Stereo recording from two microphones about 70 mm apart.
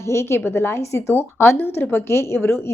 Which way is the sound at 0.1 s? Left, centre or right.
Left.